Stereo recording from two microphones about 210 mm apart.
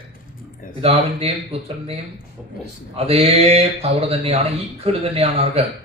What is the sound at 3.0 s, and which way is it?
Speech, 30° right (ahead or behind).